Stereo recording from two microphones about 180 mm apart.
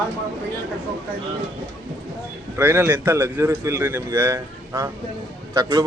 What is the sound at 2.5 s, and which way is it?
A man's voice, 15° right (ahead or behind).